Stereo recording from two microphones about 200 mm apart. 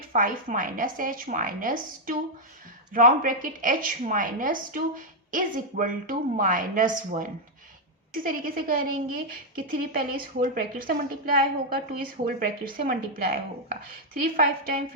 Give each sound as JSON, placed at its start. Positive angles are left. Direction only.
{"t": 0.1, "sound": "a woman's voice", "side_deg": -45}